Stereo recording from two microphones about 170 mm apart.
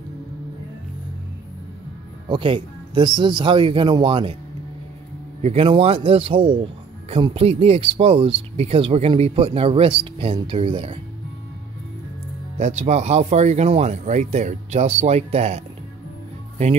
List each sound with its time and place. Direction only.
2.2 s speech: 30° right (ahead or behind)
5.4 s speech: 35° right (ahead or behind)
12.5 s speech: 40° right (ahead or behind)